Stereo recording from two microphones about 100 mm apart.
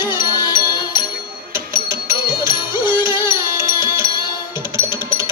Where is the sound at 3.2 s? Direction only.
30° right (ahead or behind).